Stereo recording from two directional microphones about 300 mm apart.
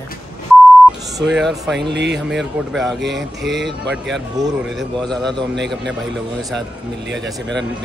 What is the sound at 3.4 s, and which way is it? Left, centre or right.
Speech, right.